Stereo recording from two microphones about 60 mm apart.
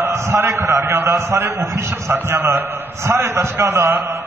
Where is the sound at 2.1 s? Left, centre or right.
Right.